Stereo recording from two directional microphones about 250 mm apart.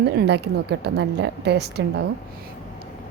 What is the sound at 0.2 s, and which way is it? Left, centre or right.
Speech, right.